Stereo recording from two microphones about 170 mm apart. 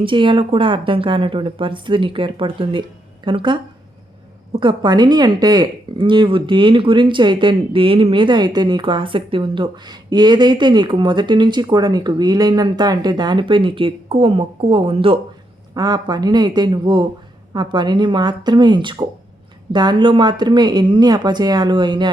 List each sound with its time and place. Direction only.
0.0 s speech: 30° right (ahead or behind)
4.6 s speech: 25° right (ahead or behind)